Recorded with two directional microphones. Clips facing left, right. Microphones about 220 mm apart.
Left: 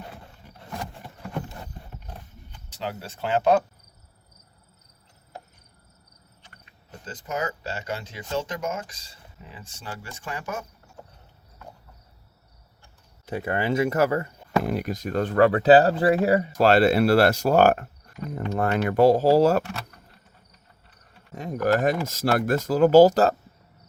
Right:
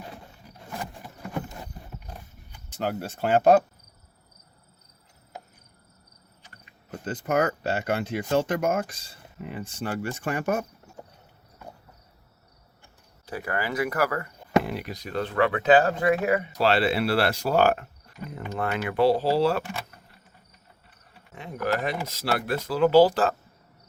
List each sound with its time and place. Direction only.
2.6 s speech: 50° right (ahead or behind)
7.0 s speech: 60° right (ahead or behind)
11.0 s clip-clop: 15° right (ahead or behind)
13.2 s speech: 25° left (ahead or behind)
14.6 s speech: 45° left (ahead or behind)
16.5 s speech: 45° left (ahead or behind)
21.3 s speech: 45° left (ahead or behind)